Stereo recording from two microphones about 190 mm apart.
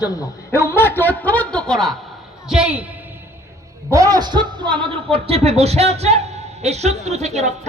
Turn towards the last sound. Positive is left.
turn(degrees=-35)  # may be behind; listen again after turning